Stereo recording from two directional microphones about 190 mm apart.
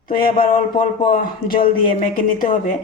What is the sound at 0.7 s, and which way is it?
Speech, 45° left (ahead or behind).